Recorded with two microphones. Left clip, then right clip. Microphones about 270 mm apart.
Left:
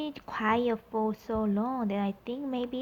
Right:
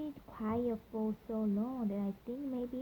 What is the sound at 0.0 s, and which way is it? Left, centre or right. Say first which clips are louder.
A woman's voice: left 11 dB; centre.